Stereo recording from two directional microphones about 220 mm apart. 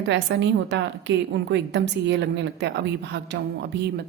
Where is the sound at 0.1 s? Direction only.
50° right (ahead or behind).